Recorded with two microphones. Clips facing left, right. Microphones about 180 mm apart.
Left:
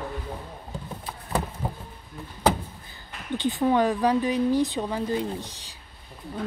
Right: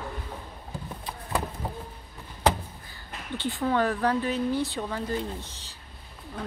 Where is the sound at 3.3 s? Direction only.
15° left (ahead or behind).